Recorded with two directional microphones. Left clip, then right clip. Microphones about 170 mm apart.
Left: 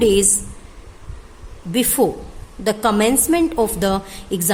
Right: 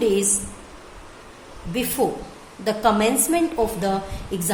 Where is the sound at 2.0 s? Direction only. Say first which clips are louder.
Left 4 dB; 55° left (ahead or behind).